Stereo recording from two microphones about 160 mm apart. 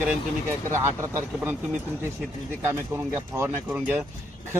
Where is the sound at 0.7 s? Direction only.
15° right (ahead or behind).